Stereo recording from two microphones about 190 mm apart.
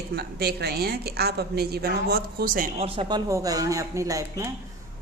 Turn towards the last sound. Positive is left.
turn(degrees=-15)  # may be behind; listen again after turning